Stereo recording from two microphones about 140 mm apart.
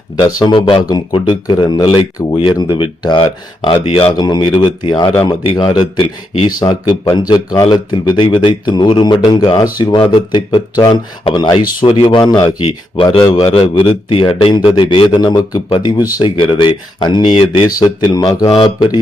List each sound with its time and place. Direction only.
0.2 s speech: 30° left (ahead or behind)
4.1 s speech: 30° left (ahead or behind)
13.2 s a man's voice: 25° left (ahead or behind)
13.5 s speech: 35° left (ahead or behind)
18.4 s speech: 40° left (ahead or behind)